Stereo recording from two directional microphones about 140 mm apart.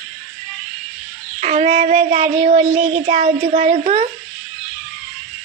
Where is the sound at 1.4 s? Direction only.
55° right (ahead or behind).